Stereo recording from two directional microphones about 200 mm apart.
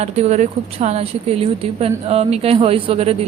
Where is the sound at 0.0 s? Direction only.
35° right (ahead or behind).